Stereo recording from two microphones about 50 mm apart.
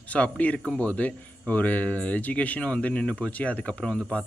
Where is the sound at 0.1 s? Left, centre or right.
Left.